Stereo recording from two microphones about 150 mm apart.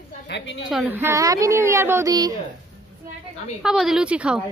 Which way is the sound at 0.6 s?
10° right (ahead or behind).